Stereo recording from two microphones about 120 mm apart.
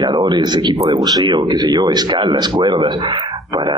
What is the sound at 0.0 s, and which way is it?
Speech, 35° right (ahead or behind).